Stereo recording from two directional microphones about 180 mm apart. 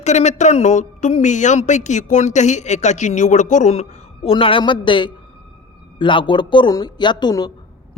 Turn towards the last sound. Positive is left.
turn(degrees=25)  # may be behind; listen again after turning